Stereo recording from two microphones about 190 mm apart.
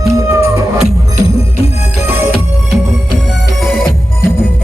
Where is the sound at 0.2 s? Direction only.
15° right (ahead or behind).